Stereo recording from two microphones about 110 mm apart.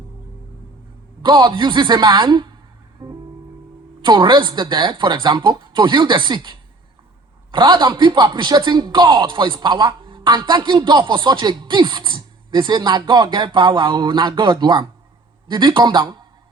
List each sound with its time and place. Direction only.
1.2 s a man's voice: 45° right (ahead or behind)
3.0 s music: 55° right (ahead or behind)
4.0 s a man's voice: 45° right (ahead or behind)